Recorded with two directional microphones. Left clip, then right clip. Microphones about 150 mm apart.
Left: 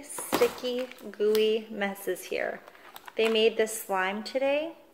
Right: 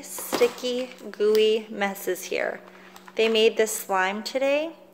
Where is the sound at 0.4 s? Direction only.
30° right (ahead or behind).